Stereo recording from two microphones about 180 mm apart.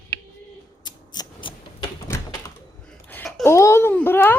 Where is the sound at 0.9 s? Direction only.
25° left (ahead or behind).